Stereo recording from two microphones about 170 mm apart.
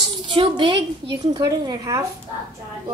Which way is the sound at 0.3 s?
30° right (ahead or behind).